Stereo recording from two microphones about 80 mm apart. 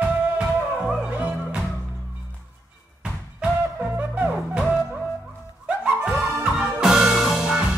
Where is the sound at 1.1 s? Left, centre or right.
Centre.